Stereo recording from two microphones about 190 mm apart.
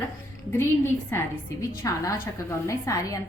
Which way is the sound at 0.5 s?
10° left (ahead or behind).